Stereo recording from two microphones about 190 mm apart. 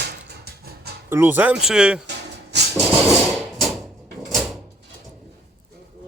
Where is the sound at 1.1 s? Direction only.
10° right (ahead or behind).